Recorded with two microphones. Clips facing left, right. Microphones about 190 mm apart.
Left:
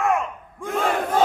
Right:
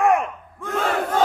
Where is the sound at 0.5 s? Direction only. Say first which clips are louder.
Even; 15° left (ahead or behind).